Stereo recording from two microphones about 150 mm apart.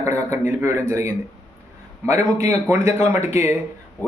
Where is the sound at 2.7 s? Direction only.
15° right (ahead or behind).